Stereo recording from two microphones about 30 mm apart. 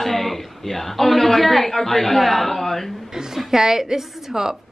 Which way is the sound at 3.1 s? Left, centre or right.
Centre.